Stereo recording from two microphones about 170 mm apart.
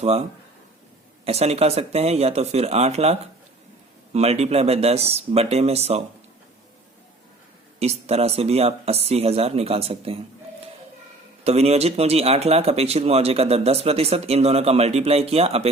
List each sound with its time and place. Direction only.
0.0 s speech: 35° right (ahead or behind)
7.8 s speech: 40° right (ahead or behind)
11.4 s speech: 40° right (ahead or behind)